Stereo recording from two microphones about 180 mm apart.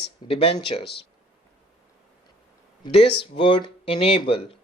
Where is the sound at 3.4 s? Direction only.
25° left (ahead or behind).